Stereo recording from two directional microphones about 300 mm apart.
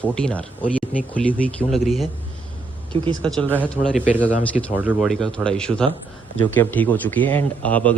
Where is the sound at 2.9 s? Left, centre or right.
Centre.